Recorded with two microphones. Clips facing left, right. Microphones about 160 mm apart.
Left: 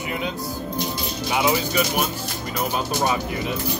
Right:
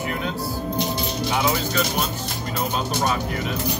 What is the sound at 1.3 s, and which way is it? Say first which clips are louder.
Speech: left 3 dB; 15° left (ahead or behind).